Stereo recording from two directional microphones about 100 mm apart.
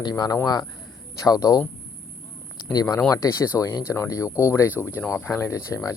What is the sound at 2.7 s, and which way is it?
Speech, 35° left (ahead or behind).